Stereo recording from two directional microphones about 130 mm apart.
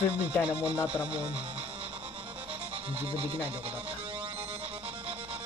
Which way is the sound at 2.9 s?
45° right (ahead or behind).